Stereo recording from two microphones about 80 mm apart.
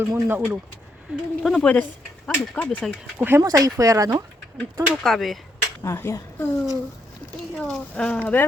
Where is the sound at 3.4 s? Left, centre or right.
Right.